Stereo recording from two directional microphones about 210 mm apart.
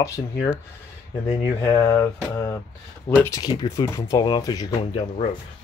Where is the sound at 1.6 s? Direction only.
15° left (ahead or behind).